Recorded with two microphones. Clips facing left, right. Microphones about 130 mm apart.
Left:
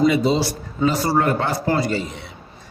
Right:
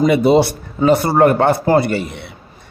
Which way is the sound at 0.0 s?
60° right (ahead or behind).